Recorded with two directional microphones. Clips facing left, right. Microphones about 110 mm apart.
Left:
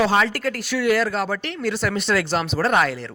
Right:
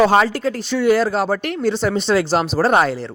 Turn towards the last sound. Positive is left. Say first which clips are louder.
# right 4 dB
turn(degrees=-30)  # may be behind; listen again after turning